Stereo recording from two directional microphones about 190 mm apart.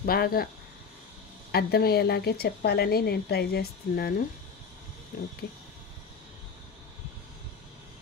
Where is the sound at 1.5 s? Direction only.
55° left (ahead or behind).